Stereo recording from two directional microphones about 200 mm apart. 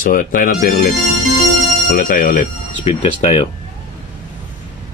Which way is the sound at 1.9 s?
45° left (ahead or behind).